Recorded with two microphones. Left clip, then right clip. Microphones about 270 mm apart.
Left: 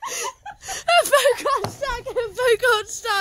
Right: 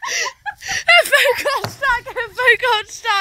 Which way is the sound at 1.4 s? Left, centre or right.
Centre.